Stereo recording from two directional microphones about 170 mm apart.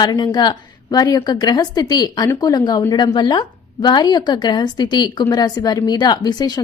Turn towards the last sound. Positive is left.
turn(degrees=25)  # may be behind; listen again after turning